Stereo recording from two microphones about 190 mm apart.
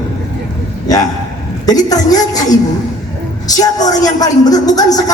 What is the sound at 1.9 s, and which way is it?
Speech, 20° left (ahead or behind).